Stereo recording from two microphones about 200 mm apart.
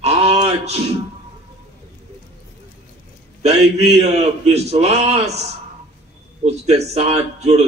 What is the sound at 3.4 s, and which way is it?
A man's voice, 30° right (ahead or behind).